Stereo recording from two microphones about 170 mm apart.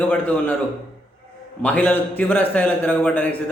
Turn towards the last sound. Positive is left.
turn(degrees=10)  # may be behind; listen again after turning